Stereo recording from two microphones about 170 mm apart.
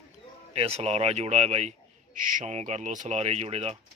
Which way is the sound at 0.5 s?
35° right (ahead or behind).